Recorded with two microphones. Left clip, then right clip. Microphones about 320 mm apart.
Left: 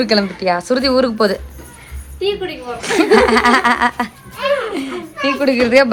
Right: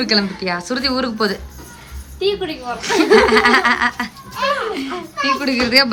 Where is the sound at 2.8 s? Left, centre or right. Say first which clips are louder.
Left 1 dB; centre.